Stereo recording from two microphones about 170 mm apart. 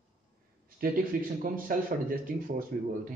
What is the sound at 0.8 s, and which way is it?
A man's voice, 60° right (ahead or behind).